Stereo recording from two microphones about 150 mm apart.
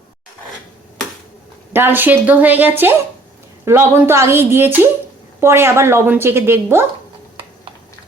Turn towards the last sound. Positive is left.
turn(degrees=-15)  # may be behind; listen again after turning